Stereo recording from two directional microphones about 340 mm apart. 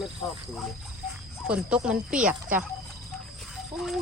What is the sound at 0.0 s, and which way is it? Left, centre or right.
Speech, centre.